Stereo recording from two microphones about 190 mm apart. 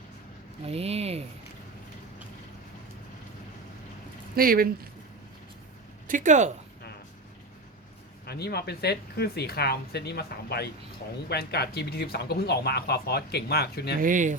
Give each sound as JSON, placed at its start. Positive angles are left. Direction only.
{"t": 0.7, "sound": "speech", "side_deg": -35}
{"t": 4.4, "sound": "speech", "side_deg": -50}
{"t": 6.1, "sound": "speech", "side_deg": -40}
{"t": 8.3, "sound": "speech", "side_deg": 60}
{"t": 14.0, "sound": "speech", "side_deg": -45}